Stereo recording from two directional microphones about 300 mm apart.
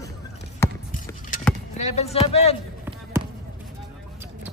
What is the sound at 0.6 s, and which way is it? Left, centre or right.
Basketball bounce, centre.